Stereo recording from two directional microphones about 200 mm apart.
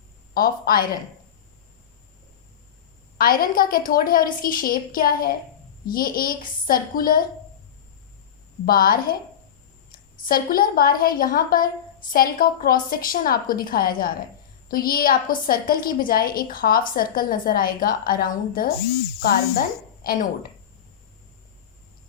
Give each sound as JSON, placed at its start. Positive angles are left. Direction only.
{"t": 0.3, "sound": "a woman's voice", "side_deg": 50}
{"t": 3.2, "sound": "a woman's voice", "side_deg": 45}
{"t": 8.6, "sound": "a woman's voice", "side_deg": 45}
{"t": 10.2, "sound": "a woman's voice", "side_deg": 45}